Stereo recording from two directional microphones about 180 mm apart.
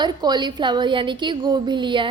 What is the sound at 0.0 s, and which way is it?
A woman's voice, 25° right (ahead or behind).